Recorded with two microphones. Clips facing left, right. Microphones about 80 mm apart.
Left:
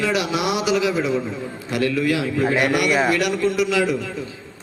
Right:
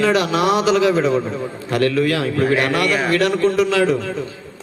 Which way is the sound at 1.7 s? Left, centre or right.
Centre.